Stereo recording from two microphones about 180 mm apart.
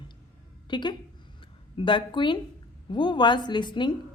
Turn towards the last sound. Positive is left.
turn(degrees=25)  # may be behind; listen again after turning